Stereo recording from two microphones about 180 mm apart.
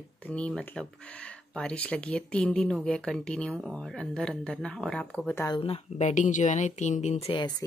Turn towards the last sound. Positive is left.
turn(degrees=30)  # may be behind; listen again after turning